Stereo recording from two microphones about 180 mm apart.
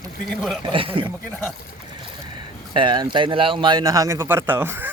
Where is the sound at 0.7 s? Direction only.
30° right (ahead or behind).